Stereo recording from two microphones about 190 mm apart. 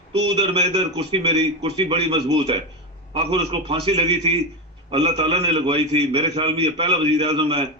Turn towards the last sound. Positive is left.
turn(degrees=-30)  # may be behind; listen again after turning